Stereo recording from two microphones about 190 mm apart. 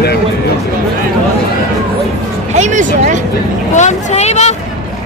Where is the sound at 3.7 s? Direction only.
40° left (ahead or behind).